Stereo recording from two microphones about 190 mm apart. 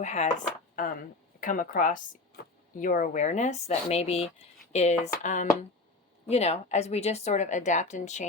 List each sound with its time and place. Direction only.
0.0 s a woman's voice: 40° left (ahead or behind)